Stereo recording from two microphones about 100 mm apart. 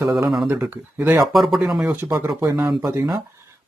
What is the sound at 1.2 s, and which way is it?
Speech, centre (ahead or behind).